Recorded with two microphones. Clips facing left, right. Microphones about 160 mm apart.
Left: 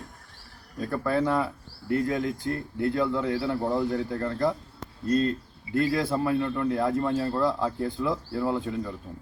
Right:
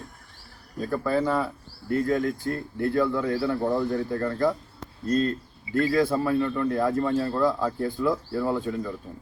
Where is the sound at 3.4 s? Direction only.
15° left (ahead or behind).